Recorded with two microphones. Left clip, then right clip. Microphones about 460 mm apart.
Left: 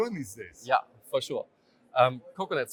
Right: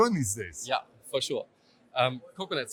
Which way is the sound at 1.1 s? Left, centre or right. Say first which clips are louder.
Even; centre.